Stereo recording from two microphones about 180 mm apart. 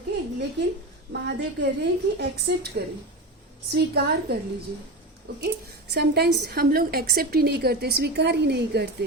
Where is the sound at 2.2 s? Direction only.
65° right (ahead or behind).